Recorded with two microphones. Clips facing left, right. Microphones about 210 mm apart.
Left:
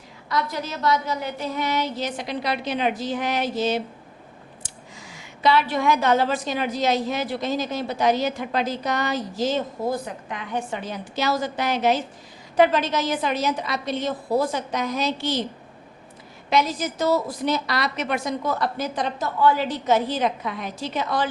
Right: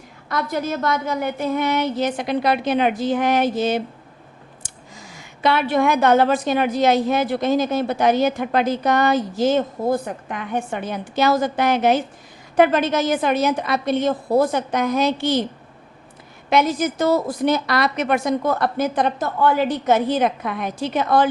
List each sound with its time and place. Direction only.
0.3 s a woman's voice: 50° right (ahead or behind)
16.5 s a woman's voice: 55° right (ahead or behind)